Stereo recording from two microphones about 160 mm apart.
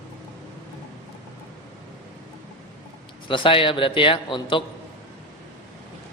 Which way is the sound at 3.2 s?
30° left (ahead or behind).